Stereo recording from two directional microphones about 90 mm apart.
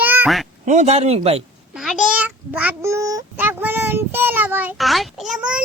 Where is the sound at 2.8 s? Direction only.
35° right (ahead or behind).